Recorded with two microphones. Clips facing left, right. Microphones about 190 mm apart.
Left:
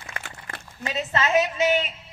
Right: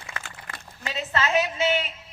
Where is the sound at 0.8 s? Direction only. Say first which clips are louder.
Left 2 dB; 20° left (ahead or behind).